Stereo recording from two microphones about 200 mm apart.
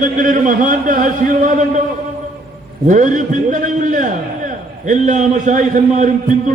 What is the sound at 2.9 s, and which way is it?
A man's voice, 40° right (ahead or behind).